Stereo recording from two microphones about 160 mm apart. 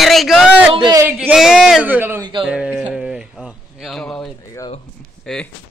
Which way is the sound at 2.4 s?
10° right (ahead or behind).